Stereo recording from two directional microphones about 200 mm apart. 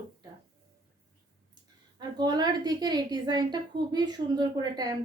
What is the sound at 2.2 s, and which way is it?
A woman's voice, 20° right (ahead or behind).